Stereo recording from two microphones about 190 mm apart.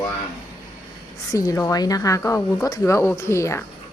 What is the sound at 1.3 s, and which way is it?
Speech, 15° left (ahead or behind).